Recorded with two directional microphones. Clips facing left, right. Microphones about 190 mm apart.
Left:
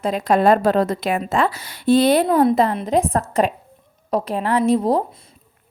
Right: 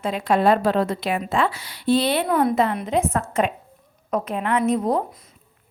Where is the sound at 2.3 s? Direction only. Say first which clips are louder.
Left 4 dB; 30° left (ahead or behind).